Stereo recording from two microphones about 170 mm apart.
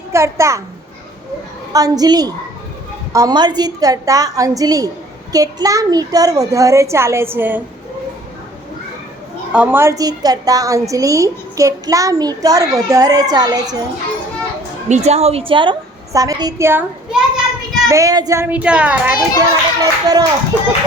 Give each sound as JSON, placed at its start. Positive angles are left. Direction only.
{"t": 0.1, "sound": "a child's voice", "side_deg": -15}
{"t": 1.7, "sound": "a woman's voice", "side_deg": -20}
{"t": 9.5, "sound": "a woman's voice", "side_deg": -10}
{"t": 14.8, "sound": "a woman's voice", "side_deg": -40}
{"t": 17.1, "sound": "a sound", "side_deg": -5}
{"t": 17.8, "sound": "a child's voice", "side_deg": -20}
{"t": 19.4, "sound": "a woman's voice", "side_deg": -20}